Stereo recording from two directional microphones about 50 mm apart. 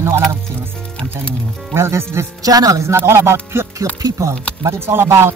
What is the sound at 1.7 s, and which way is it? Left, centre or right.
Speech, right.